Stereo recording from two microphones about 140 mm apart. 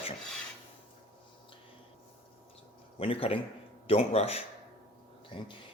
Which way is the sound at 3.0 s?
40° left (ahead or behind).